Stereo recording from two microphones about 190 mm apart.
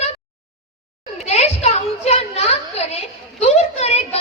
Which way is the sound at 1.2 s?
35° left (ahead or behind).